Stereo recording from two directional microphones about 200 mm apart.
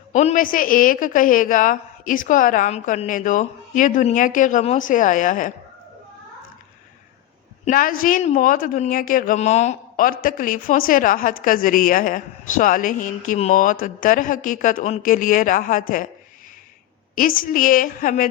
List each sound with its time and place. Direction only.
0.1 s a woman's voice: 35° left (ahead or behind)
7.6 s a woman's voice: 45° left (ahead or behind)
17.2 s a woman's voice: 45° left (ahead or behind)